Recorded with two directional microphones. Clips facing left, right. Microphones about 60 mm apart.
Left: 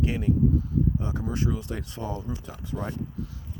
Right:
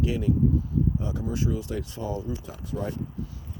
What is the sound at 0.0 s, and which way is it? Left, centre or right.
Speech, left.